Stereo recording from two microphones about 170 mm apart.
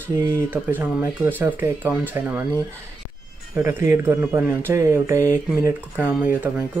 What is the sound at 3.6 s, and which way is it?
Speech, 15° right (ahead or behind).